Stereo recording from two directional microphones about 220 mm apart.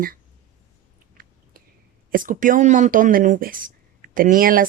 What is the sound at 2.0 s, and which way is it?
Speech, 40° right (ahead or behind).